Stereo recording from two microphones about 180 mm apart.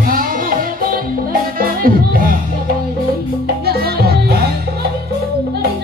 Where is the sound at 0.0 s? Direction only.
50° right (ahead or behind).